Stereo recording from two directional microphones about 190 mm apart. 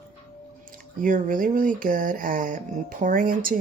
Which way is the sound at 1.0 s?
45° right (ahead or behind).